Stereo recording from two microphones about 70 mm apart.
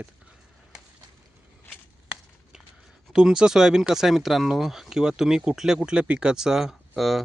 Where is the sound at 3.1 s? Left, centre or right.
Centre.